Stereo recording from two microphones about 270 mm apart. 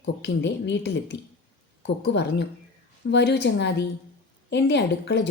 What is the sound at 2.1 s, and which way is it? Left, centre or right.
Speech, left.